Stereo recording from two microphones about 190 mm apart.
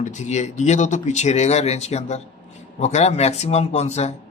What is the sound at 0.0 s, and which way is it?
Speech, 40° left (ahead or behind).